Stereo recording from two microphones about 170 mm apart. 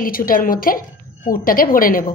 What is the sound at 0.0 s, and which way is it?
A woman's voice, 55° left (ahead or behind).